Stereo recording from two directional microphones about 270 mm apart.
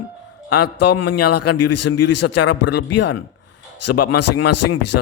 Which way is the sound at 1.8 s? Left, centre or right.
Left.